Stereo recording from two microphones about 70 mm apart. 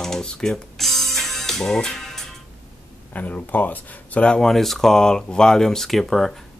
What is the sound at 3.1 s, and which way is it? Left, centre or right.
Speech, left.